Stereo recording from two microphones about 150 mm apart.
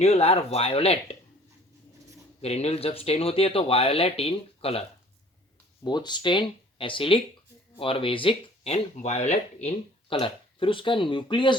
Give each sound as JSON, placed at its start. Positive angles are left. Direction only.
{"t": 0.0, "sound": "speech", "side_deg": 45}
{"t": 2.4, "sound": "speech", "side_deg": 45}
{"t": 5.8, "sound": "speech", "side_deg": 30}